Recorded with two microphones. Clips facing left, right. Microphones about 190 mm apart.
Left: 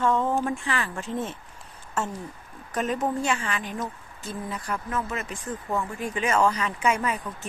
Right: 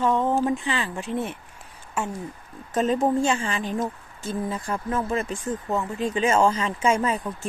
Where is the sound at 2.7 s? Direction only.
25° right (ahead or behind).